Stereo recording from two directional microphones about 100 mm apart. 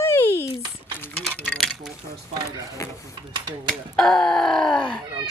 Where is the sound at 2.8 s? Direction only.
30° left (ahead or behind).